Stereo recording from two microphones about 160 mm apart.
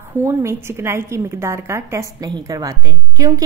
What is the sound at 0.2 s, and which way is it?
A woman's voice, 15° right (ahead or behind).